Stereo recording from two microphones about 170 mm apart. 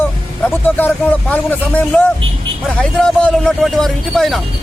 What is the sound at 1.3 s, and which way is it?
A man's voice, 10° left (ahead or behind).